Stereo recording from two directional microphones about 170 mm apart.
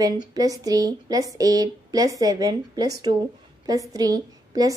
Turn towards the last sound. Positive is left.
turn(degrees=-20)  # may be behind; listen again after turning